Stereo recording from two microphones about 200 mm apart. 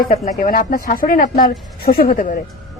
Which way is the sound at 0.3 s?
45° left (ahead or behind).